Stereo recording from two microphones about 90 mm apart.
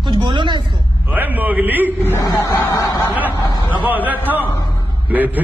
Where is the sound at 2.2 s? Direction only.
40° left (ahead or behind).